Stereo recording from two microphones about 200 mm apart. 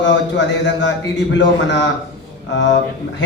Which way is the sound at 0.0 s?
65° left (ahead or behind).